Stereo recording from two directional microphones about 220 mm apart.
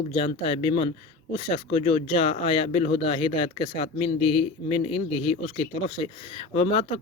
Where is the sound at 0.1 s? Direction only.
25° left (ahead or behind).